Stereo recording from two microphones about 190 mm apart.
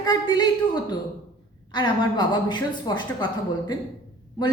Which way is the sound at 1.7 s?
20° left (ahead or behind).